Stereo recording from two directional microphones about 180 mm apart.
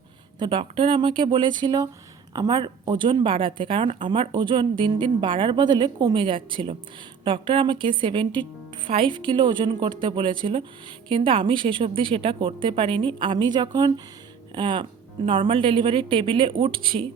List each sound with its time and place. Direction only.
0.3 s a woman's voice: 25° right (ahead or behind)